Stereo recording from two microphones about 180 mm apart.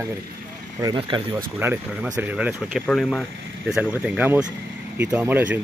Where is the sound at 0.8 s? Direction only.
25° right (ahead or behind).